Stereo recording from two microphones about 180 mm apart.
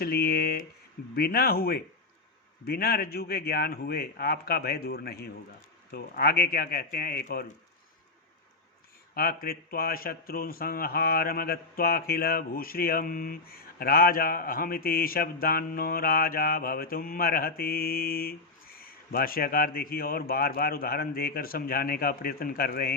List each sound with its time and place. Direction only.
0.0 s a man's voice: 60° left (ahead or behind)
9.1 s a man's voice: 55° left (ahead or behind)